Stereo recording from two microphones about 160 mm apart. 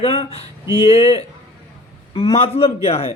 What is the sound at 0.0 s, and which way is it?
Speech, 40° left (ahead or behind).